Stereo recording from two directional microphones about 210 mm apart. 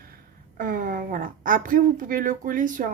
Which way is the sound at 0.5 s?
40° right (ahead or behind).